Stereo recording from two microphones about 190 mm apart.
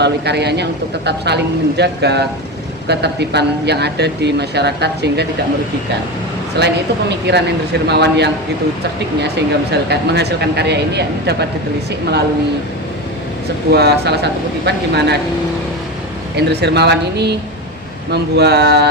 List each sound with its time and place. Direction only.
0.0 s speech: 60° right (ahead or behind)
6.6 s speech: 60° right (ahead or behind)
9.7 s speech: 60° right (ahead or behind)
13.7 s speech: 60° right (ahead or behind)
16.3 s speech: 60° right (ahead or behind)